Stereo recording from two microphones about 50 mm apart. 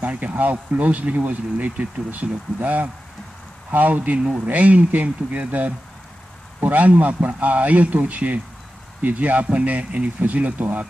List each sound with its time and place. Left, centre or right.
0.0 s speech: right